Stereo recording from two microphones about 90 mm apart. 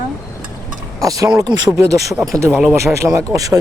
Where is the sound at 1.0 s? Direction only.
40° right (ahead or behind).